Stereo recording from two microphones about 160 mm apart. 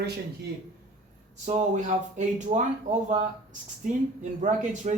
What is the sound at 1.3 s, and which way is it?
Speech, 50° right (ahead or behind).